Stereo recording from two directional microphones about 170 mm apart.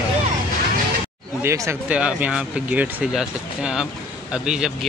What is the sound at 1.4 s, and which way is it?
Speech, 15° right (ahead or behind).